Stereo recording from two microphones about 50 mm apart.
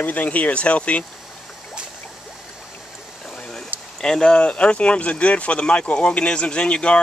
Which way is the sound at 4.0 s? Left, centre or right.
Centre.